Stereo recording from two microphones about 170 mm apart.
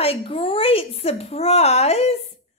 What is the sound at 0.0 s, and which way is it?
A child's voice, 35° left (ahead or behind).